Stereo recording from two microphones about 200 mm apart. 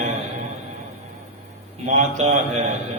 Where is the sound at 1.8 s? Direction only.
35° right (ahead or behind).